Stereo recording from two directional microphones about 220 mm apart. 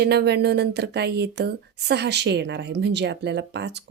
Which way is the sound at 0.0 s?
50° right (ahead or behind).